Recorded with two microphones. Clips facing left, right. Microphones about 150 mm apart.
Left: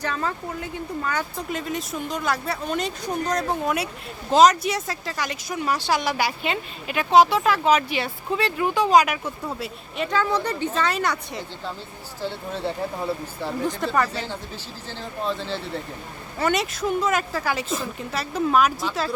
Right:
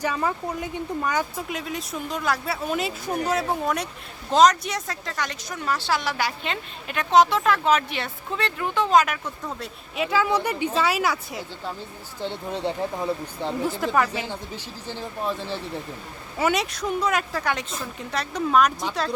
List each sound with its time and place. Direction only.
0.0 s speech: 10° right (ahead or behind); by 9.6 s 10° left (ahead or behind)
10.0 s a woman's voice: 5° right (ahead or behind)
12.2 s a woman's voice: 20° right (ahead or behind)
16.4 s speech: centre (ahead or behind)